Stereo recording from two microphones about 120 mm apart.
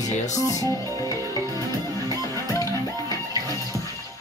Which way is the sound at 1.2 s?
30° right (ahead or behind).